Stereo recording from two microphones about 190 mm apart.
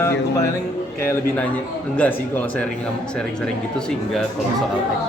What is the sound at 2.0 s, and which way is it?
Speech, 10° left (ahead or behind).